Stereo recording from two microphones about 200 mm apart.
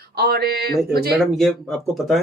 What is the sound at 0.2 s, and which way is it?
Speech, 50° right (ahead or behind).